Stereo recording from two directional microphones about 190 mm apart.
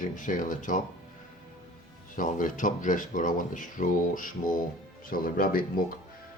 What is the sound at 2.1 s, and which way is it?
Speech, 45° left (ahead or behind).